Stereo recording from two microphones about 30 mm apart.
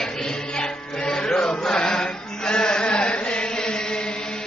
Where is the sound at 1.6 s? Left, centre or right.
Left.